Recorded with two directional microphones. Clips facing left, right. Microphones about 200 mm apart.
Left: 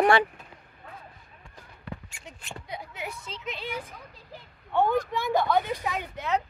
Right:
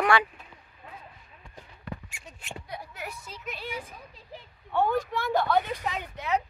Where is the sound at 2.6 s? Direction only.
20° left (ahead or behind).